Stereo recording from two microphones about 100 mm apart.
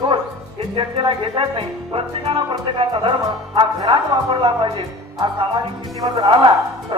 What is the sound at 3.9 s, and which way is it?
A man's voice, 65° right (ahead or behind).